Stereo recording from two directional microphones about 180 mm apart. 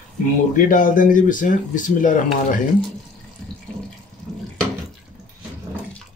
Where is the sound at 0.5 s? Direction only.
45° left (ahead or behind).